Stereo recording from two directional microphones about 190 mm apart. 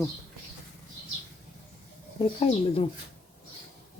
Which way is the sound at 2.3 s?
30° left (ahead or behind).